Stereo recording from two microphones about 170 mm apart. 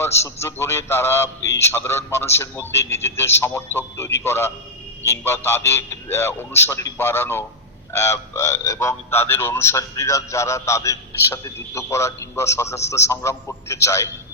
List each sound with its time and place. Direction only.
0.0 s speech: 15° left (ahead or behind)